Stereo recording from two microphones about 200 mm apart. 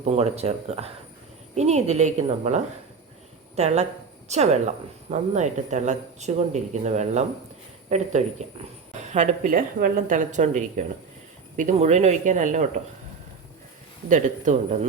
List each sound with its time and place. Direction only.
0.0 s a woman's voice: 35° right (ahead or behind)
14.1 s speech: 35° right (ahead or behind)